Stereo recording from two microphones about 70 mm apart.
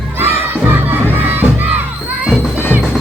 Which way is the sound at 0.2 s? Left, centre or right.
Right.